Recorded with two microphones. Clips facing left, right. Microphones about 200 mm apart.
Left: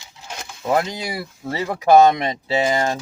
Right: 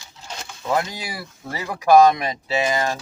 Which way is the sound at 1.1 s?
25° left (ahead or behind).